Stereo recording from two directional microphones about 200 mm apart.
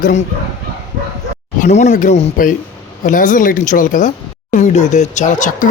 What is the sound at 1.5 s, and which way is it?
Speech, 35° left (ahead or behind).